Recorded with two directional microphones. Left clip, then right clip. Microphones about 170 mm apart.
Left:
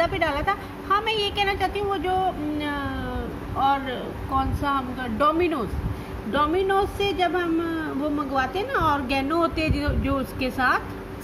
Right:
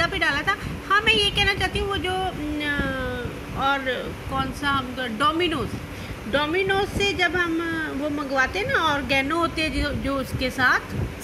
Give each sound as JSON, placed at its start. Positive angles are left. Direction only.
{"t": 0.0, "sound": "a woman's voice", "side_deg": 25}
{"t": 4.4, "sound": "speech", "side_deg": 25}
{"t": 9.4, "sound": "speech", "side_deg": 15}